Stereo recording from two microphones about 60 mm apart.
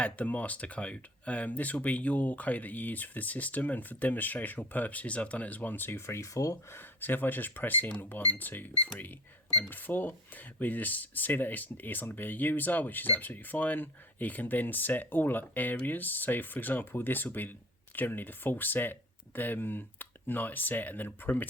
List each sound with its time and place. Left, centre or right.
0.0 s speech: left
6.1 s speech: left
6.7 s speech: left